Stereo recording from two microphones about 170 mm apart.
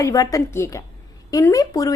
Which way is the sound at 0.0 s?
20° left (ahead or behind).